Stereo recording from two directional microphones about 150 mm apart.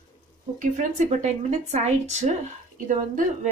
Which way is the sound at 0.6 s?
55° right (ahead or behind).